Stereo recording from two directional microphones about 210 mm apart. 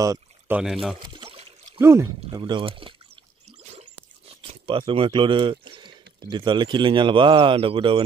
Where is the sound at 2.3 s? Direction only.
25° right (ahead or behind).